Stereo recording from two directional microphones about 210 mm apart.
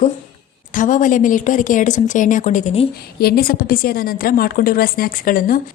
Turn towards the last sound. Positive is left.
turn(degrees=40)  # may be behind; listen again after turning